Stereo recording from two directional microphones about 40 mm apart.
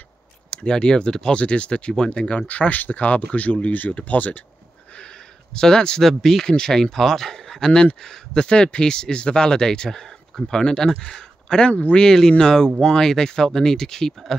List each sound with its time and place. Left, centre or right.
0.6 s speech: left
1.4 s speech: left
2.4 s speech: left
4.9 s a sound: centre
6.0 s speech: centre
6.4 s speech: centre